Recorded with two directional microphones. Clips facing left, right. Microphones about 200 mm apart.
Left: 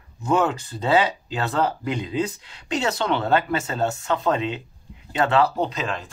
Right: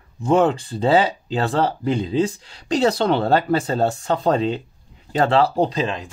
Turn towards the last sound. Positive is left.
turn(degrees=-30)  # may be behind; listen again after turning